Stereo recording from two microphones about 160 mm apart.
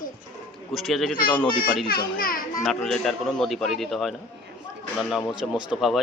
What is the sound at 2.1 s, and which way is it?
Speech, 65° left (ahead or behind).